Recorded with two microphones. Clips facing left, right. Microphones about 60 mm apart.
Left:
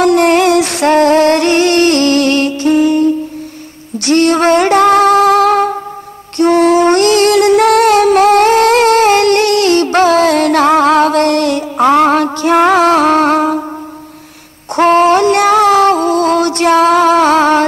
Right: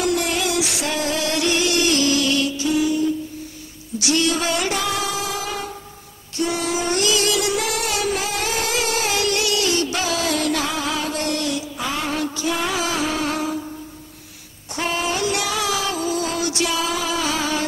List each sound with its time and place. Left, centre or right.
0.0 s music: left
14.8 s music: left